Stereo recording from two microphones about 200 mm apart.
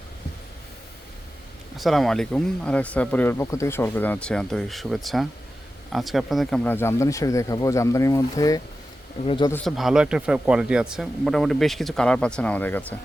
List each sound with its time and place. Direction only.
1.7 s speech: centre (ahead or behind); by 9.5 s 25° left (ahead or behind)
9.6 s speech: centre (ahead or behind)